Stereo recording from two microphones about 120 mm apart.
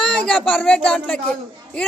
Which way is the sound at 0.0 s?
5° left (ahead or behind).